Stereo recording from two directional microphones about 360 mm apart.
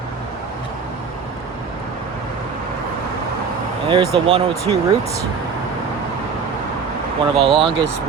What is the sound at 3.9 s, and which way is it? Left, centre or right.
Speech, centre.